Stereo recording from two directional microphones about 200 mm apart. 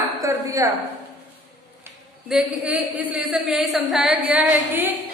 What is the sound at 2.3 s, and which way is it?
A man's voice, 5° right (ahead or behind).